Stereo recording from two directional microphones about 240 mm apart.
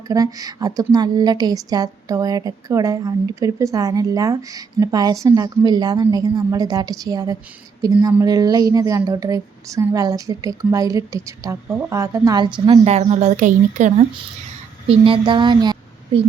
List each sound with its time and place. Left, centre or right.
0.1 s a woman's voice: centre